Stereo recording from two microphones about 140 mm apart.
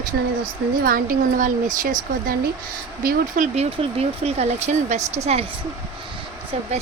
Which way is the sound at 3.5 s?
45° right (ahead or behind).